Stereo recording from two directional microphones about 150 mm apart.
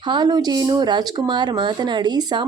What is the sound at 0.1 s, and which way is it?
A woman's voice, 30° right (ahead or behind).